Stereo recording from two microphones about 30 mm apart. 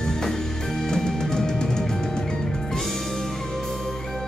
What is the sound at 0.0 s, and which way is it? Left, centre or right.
Music, centre.